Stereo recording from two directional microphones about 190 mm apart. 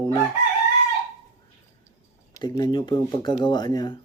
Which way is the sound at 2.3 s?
20° left (ahead or behind).